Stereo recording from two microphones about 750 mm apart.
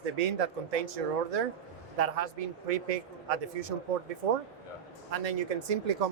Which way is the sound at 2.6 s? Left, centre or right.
Right.